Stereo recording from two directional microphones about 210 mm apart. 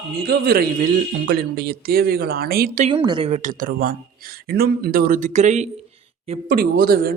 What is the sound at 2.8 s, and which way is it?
Speech, 20° right (ahead or behind).